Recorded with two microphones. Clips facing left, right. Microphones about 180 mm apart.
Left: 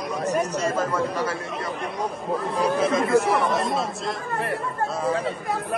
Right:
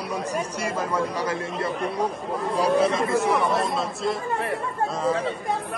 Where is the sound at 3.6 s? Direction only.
Centre (ahead or behind).